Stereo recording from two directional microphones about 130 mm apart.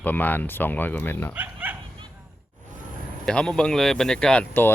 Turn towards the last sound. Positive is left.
turn(degrees=10)  # may be behind; listen again after turning